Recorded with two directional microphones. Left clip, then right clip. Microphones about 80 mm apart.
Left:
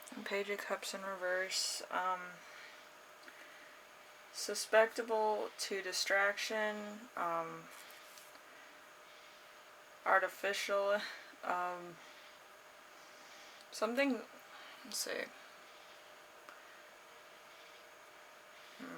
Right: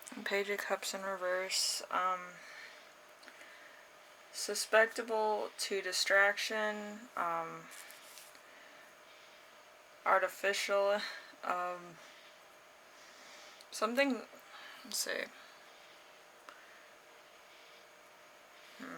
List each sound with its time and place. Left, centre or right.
0.2 s speech: right
4.4 s speech: right
10.0 s speech: right
13.7 s speech: right